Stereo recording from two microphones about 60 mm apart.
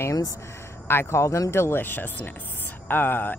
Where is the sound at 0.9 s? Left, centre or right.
Left.